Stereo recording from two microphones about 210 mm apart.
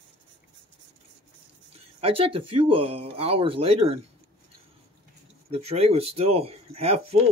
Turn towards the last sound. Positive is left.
turn(degrees=-30)  # may be behind; listen again after turning